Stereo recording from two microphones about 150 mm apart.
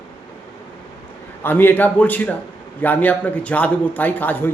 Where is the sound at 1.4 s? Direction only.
15° left (ahead or behind).